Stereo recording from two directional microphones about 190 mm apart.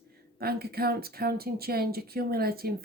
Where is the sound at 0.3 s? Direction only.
55° right (ahead or behind).